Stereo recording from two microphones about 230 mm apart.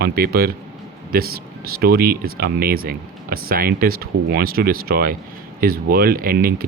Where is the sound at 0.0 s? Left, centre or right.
Right.